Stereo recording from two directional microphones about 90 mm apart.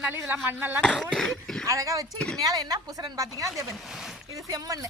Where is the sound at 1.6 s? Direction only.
40° right (ahead or behind).